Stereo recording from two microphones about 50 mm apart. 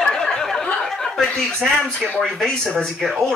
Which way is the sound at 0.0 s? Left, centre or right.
Centre.